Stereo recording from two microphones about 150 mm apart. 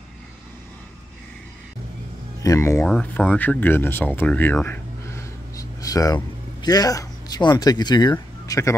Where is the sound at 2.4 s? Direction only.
20° left (ahead or behind).